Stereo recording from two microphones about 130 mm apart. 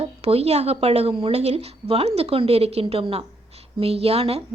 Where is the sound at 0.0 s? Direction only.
50° right (ahead or behind).